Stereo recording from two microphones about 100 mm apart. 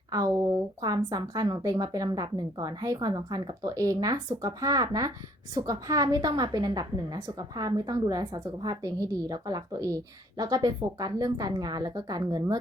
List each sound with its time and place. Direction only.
0.1 s a woman's voice: 35° right (ahead or behind)